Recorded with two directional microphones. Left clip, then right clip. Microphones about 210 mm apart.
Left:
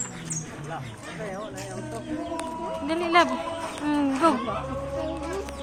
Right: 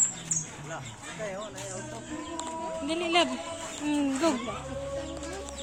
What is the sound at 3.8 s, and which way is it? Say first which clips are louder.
Speech: left 5 dB; 20° right (ahead or behind).